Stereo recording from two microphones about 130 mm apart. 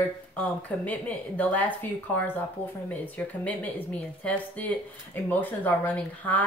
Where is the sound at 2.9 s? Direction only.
10° left (ahead or behind).